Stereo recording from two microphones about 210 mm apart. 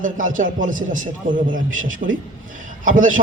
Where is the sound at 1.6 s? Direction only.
65° right (ahead or behind).